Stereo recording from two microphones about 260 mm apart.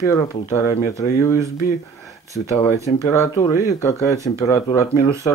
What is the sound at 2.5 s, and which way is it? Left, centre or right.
Speech, centre.